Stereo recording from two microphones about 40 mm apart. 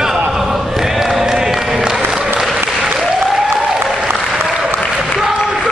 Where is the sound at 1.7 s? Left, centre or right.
Centre.